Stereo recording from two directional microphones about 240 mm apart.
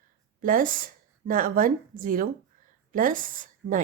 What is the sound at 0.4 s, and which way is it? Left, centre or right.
A woman's voice, right.